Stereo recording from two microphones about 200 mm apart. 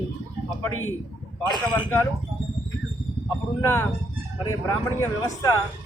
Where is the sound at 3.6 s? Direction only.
15° left (ahead or behind).